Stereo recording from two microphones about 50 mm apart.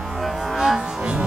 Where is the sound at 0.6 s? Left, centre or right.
Centre.